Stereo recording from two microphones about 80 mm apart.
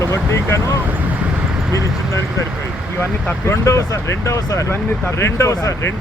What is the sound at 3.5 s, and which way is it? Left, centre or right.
Speech, left.